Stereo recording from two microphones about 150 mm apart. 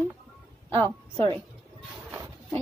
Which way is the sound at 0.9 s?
35° right (ahead or behind).